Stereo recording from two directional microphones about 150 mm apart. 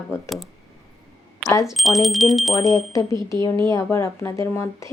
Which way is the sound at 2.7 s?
20° left (ahead or behind).